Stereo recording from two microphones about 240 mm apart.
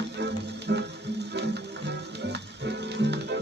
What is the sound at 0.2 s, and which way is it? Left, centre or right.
Music, right.